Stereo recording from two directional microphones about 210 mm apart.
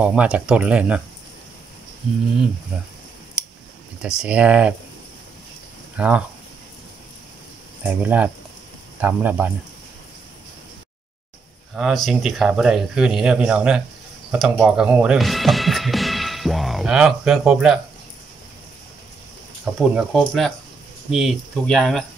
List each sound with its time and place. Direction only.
0.0 s speech: 5° right (ahead or behind)
2.7 s speech: 5° right (ahead or behind)
3.4 s a sound: 5° right (ahead or behind)
4.2 s speech: 5° right (ahead or behind)
5.9 s speech: 5° right (ahead or behind)
7.8 s speech: 5° right (ahead or behind)
11.7 s speech: centre (ahead or behind)
19.7 s speech: centre (ahead or behind)